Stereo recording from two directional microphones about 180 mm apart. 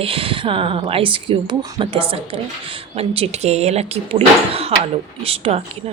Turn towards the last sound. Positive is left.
turn(degrees=-35)  # may be behind; listen again after turning